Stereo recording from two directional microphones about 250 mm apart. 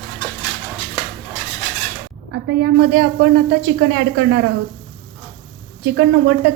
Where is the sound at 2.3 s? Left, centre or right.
Right.